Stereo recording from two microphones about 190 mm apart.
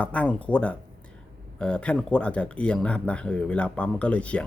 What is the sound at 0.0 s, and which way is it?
Speech, 5° left (ahead or behind).